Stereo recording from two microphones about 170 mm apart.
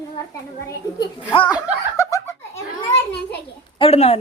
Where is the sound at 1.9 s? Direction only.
20° left (ahead or behind).